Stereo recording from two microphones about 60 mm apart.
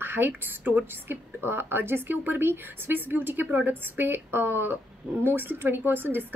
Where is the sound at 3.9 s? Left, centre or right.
Right.